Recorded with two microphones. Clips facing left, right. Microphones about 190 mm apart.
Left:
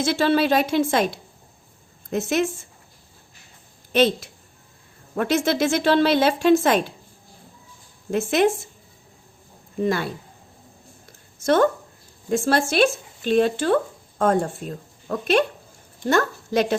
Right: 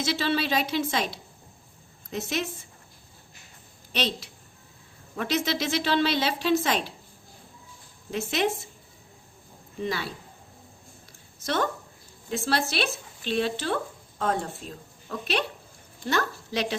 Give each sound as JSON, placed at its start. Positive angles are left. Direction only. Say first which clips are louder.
{"t": 0.0, "sound": "a woman's voice", "louder": "left 7 dB", "side_deg": 50}
{"t": 3.9, "sound": "a woman's voice", "louder": "left 11 dB", "side_deg": 50}
{"t": 8.1, "sound": "a woman's voice", "louder": "left 7 dB", "side_deg": 50}
{"t": 9.8, "sound": "a woman's voice", "louder": "left 8 dB", "side_deg": 50}
{"t": 11.4, "sound": "a woman's voice", "louder": "left 10 dB", "side_deg": 50}